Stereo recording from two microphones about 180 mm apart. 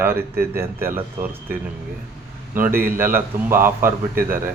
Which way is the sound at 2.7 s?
55° right (ahead or behind).